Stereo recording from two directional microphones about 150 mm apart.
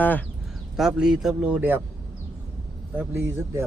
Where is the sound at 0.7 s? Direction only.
5° right (ahead or behind).